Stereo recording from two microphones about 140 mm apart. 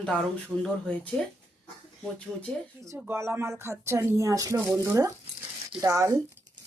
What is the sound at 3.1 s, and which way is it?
Speech, 15° right (ahead or behind).